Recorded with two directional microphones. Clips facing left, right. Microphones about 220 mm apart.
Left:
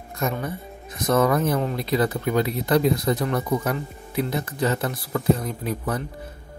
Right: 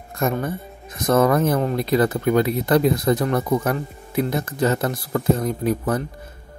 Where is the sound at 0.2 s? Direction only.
50° right (ahead or behind).